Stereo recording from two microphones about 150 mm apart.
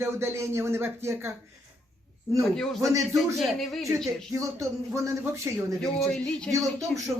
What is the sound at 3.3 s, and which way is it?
Speech, centre (ahead or behind).